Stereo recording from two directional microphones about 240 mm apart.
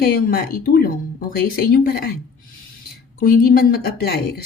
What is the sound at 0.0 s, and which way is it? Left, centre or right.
Speech, left.